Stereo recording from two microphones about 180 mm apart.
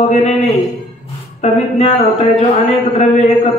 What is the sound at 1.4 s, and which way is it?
Speech, 40° left (ahead or behind).